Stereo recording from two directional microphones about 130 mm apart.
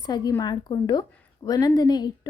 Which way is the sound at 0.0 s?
30° left (ahead or behind).